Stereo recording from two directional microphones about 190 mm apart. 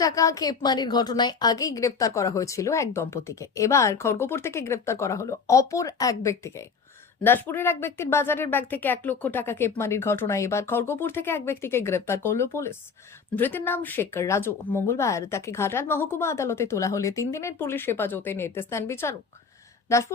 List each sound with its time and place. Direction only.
0.0 s a woman's voice: 15° left (ahead or behind)